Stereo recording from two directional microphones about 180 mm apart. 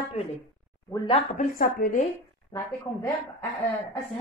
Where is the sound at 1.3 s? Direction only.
50° left (ahead or behind).